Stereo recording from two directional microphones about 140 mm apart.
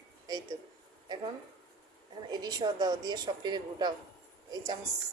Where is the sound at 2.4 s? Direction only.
30° right (ahead or behind).